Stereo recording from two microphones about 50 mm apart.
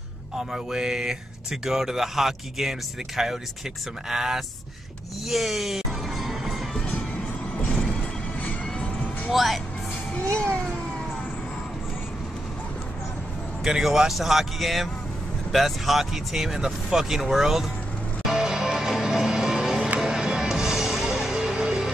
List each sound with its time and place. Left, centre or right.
0.4 s speech: centre
5.3 s music: centre
7.5 s music: left
9.3 s speech: centre
13.7 s speech: centre
18.2 s music: centre